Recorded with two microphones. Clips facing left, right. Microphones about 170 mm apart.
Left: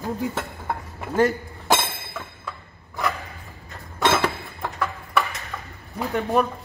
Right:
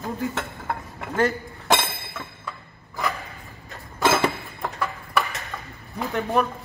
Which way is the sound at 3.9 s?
Centre (ahead or behind).